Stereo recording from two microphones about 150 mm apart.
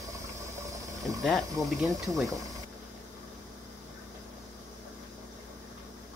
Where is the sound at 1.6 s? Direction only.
20° right (ahead or behind).